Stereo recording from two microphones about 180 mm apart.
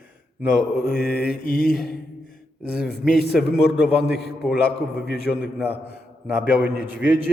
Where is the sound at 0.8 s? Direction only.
60° left (ahead or behind).